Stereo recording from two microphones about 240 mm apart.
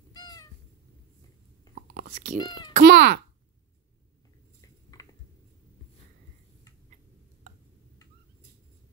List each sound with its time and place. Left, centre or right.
0.1 s cat: centre
1.8 s whispering: right
2.3 s a child's voice: centre
2.7 s speech: right